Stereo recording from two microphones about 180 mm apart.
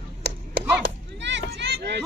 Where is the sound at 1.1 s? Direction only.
80° right.